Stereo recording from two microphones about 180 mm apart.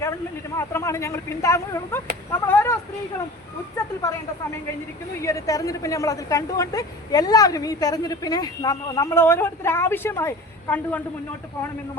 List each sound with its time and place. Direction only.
0.0 s speech: 15° left (ahead or behind)
2.3 s a sound: 10° left (ahead or behind)
5.2 s a woman's voice: 20° left (ahead or behind)